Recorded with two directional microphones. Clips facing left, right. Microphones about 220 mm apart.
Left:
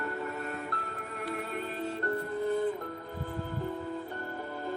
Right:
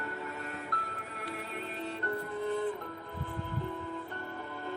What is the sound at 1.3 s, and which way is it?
Music, 45° left (ahead or behind).